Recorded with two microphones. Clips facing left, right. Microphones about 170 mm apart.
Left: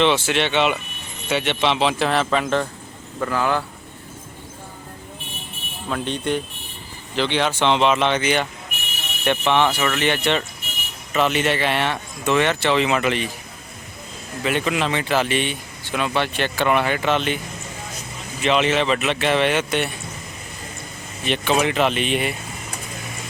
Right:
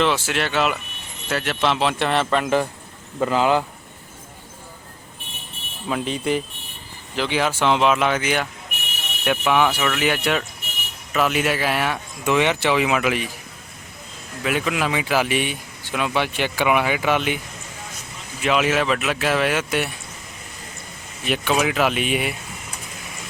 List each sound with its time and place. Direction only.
0.0 s speech: centre (ahead or behind)
3.2 s speech: 20° right (ahead or behind)
5.9 s speech: 5° right (ahead or behind)
14.4 s speech: 5° right (ahead or behind)
18.4 s speech: 5° right (ahead or behind)
21.2 s speech: 5° right (ahead or behind)